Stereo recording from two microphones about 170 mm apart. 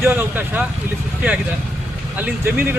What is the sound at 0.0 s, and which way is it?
Speech, 10° right (ahead or behind).